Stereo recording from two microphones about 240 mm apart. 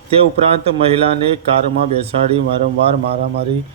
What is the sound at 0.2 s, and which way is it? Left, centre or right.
Speech, right.